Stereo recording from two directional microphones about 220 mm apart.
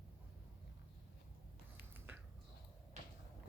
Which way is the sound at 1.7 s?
10° right (ahead or behind).